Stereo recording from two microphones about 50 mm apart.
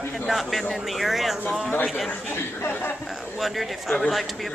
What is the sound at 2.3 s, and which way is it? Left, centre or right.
Speech, left.